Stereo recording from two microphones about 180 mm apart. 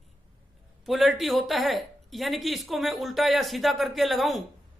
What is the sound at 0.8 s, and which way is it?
A man's voice, centre (ahead or behind).